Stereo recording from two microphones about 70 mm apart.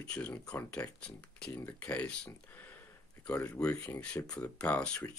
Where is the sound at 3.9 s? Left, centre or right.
Centre.